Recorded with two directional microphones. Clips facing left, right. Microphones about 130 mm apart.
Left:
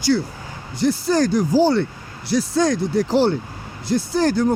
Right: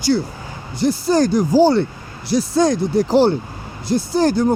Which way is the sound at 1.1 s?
45° right (ahead or behind).